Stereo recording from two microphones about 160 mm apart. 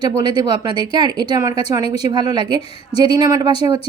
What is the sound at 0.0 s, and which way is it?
A woman's voice, 25° right (ahead or behind).